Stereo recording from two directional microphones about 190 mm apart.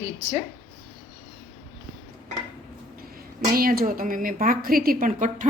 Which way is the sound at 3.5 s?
50° right (ahead or behind).